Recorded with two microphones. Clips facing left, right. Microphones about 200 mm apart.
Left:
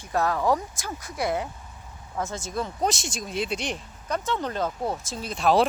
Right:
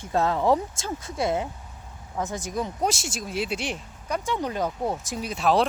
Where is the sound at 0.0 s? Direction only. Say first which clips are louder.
Right 1 dB; 25° right (ahead or behind).